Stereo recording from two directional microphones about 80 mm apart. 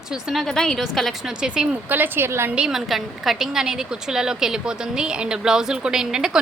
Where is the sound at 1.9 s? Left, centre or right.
Right.